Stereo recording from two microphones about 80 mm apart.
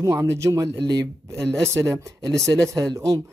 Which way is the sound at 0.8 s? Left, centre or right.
Right.